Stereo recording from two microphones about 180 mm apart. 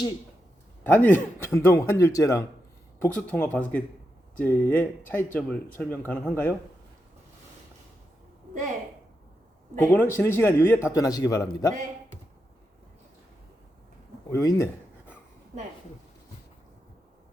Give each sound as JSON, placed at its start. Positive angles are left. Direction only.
{"t": 0.9, "sound": "speech", "side_deg": 10}
{"t": 9.7, "sound": "speech", "side_deg": 10}
{"t": 14.3, "sound": "a sound", "side_deg": 15}